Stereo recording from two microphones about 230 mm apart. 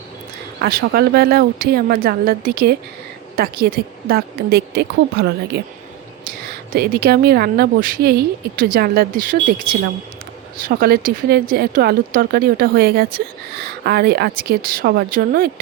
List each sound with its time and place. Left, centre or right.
0.6 s speech: right
6.7 s speech: right
10.7 s speech: right